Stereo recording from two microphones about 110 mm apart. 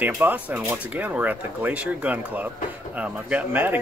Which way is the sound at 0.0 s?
15° right (ahead or behind).